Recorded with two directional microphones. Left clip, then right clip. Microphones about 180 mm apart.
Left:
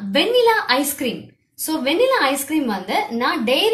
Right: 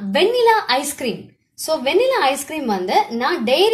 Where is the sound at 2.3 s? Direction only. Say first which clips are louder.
Even; 40° right (ahead or behind).